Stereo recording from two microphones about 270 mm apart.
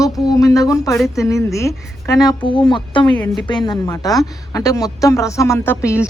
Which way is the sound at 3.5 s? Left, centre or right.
Centre.